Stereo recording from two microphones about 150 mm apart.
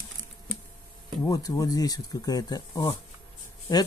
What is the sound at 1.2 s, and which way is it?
Speech, 25° left (ahead or behind).